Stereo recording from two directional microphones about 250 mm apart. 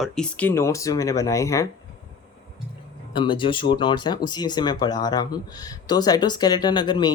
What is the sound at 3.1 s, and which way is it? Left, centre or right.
Speech, centre.